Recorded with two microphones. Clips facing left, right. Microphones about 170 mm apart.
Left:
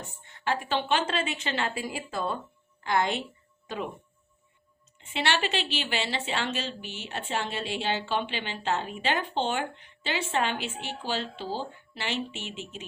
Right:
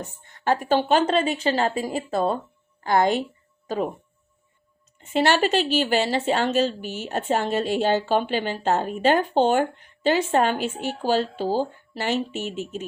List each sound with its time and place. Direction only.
0.3 s speech: 45° right (ahead or behind)
4.9 s a woman's voice: 45° right (ahead or behind)